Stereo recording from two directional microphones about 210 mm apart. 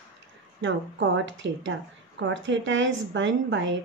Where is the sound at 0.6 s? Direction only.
60° right (ahead or behind).